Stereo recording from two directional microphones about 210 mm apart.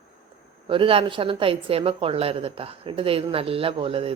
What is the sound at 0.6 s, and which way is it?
Speech, 25° right (ahead or behind).